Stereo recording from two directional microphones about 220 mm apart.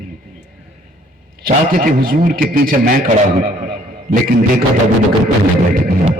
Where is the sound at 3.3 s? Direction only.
40° right (ahead or behind).